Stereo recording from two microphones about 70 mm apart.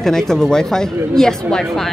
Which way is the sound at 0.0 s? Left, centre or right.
Centre.